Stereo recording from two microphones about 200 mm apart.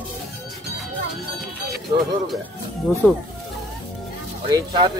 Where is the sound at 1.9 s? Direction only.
20° right (ahead or behind).